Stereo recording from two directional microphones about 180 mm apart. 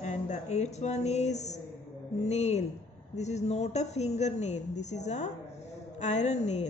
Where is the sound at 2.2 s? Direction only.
40° left (ahead or behind).